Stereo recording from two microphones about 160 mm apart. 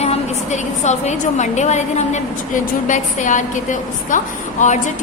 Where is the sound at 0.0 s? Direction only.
45° left (ahead or behind).